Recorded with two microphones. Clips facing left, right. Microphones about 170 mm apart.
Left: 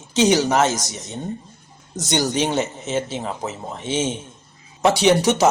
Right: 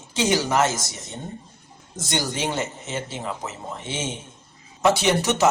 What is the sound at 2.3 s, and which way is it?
Speech, 20° left (ahead or behind).